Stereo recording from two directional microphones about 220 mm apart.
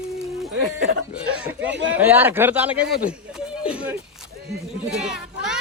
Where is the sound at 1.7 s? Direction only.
55° right (ahead or behind).